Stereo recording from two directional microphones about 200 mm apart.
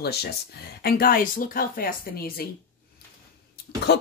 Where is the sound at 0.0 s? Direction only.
55° left (ahead or behind).